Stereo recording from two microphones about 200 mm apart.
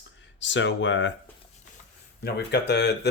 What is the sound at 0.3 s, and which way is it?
Speech, 65° left (ahead or behind).